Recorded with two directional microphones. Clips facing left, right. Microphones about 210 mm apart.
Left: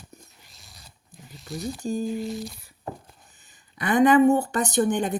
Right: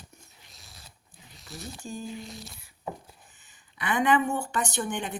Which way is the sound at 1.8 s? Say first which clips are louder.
Left 10 dB; 40° left (ahead or behind).